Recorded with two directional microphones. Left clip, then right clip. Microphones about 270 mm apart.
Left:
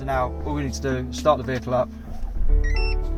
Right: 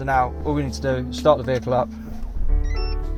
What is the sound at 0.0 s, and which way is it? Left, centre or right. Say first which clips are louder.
Speech: right 4 dB; right.